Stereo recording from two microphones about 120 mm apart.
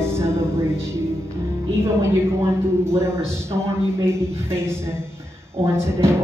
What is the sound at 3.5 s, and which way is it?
A woman's voice, 20° right (ahead or behind).